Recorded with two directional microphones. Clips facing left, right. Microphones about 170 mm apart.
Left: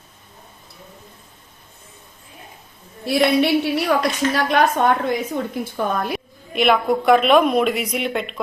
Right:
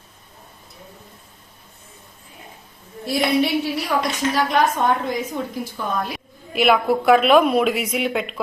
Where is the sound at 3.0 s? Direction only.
65° left (ahead or behind).